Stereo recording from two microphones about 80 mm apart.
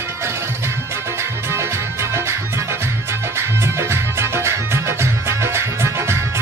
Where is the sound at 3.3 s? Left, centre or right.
Right.